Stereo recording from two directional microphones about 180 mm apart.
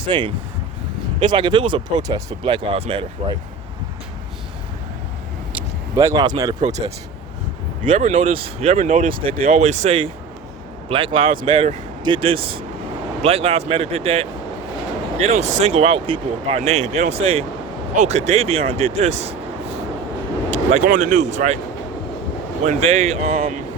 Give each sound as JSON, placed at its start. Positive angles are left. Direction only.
{"t": 0.0, "sound": "speech", "side_deg": -25}
{"t": 6.0, "sound": "speech", "side_deg": -20}
{"t": 6.6, "sound": "speech", "side_deg": -40}
{"t": 8.4, "sound": "speech", "side_deg": -35}
{"t": 15.4, "sound": "speech", "side_deg": -40}
{"t": 20.5, "sound": "speech", "side_deg": -40}
{"t": 22.6, "sound": "speech", "side_deg": -35}